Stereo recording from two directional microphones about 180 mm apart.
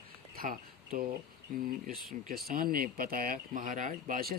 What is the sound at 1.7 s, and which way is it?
Speech, 50° right (ahead or behind).